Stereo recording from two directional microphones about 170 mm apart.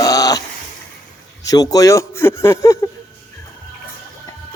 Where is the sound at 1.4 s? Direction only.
20° left (ahead or behind).